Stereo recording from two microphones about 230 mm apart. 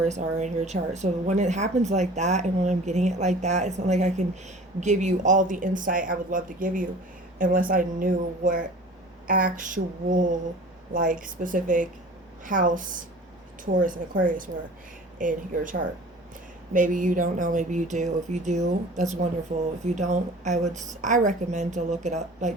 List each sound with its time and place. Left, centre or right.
0.0 s a woman's voice: right